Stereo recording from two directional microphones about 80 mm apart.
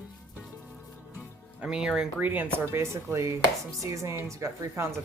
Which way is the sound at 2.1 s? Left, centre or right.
Right.